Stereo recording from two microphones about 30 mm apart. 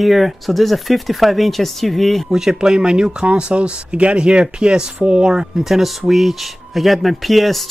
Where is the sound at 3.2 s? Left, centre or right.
Right.